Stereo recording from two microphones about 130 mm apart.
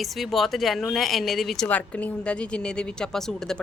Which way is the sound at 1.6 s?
10° left (ahead or behind).